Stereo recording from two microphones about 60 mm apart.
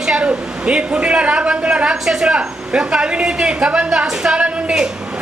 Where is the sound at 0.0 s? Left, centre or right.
Centre.